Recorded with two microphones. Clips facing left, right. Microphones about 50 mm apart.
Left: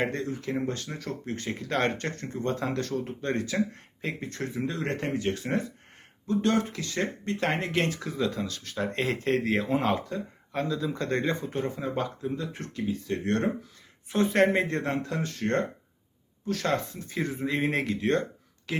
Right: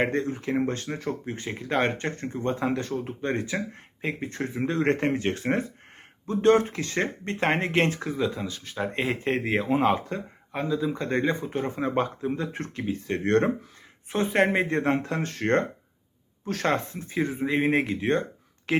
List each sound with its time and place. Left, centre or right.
0.0 s speech: right
8.2 s speech: centre
11.8 s speech: right
14.3 s speech: centre
17.1 s speech: centre
18.7 s speech: right